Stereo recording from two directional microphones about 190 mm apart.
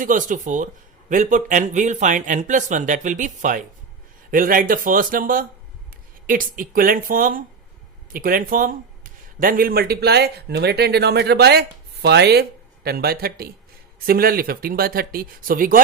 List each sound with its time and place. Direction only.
0.0 s speech: 45° right (ahead or behind)